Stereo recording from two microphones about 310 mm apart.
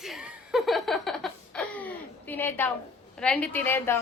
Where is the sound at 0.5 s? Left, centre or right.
Centre.